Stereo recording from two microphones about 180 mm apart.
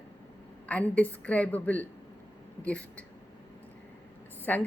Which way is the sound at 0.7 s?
10° left (ahead or behind).